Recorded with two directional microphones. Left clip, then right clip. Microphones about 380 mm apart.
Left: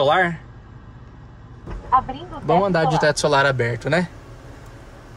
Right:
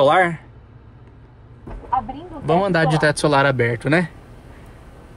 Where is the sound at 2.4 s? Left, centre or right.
Right.